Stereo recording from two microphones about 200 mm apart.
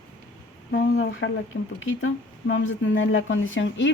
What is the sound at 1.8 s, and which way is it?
A woman's voice, 75° left (ahead or behind).